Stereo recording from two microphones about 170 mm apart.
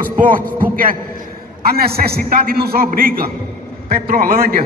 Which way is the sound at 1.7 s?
65° right (ahead or behind).